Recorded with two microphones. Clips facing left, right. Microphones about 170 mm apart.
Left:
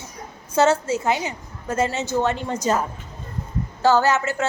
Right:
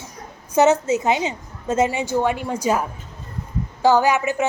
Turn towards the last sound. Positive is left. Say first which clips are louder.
# right 2 dB
turn(degrees=-15)  # may be behind; listen again after turning